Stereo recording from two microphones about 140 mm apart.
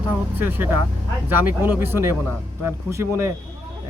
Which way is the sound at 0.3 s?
15° right (ahead or behind).